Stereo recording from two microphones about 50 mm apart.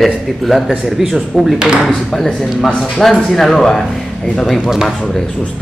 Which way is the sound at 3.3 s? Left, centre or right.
Centre.